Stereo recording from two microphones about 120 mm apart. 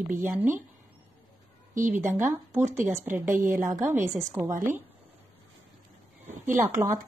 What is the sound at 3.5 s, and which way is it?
A woman's voice, 25° right (ahead or behind).